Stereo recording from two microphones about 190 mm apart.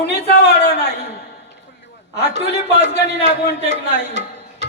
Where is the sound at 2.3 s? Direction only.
65° left (ahead or behind).